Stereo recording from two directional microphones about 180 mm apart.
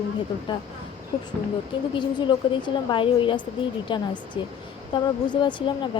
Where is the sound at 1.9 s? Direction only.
25° left (ahead or behind).